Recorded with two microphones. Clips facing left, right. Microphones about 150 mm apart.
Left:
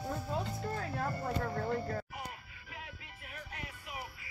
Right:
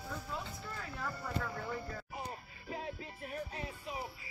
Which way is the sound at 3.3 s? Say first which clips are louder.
Right 5 dB; 30° right (ahead or behind).